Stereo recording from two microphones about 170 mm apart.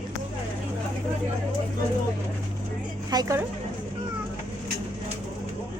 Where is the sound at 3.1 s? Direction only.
20° right (ahead or behind).